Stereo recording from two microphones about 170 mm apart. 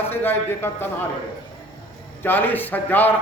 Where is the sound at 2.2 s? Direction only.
10° left (ahead or behind).